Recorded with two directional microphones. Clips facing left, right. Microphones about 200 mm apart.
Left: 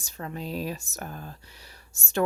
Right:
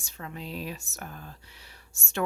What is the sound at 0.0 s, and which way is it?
Speech, 40° left (ahead or behind).